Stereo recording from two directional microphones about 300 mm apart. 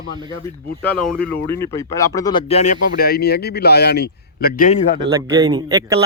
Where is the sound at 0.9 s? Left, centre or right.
Centre; by 4.7 s left.